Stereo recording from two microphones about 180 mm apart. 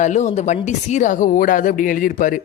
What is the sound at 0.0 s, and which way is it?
Speech, 40° left (ahead or behind).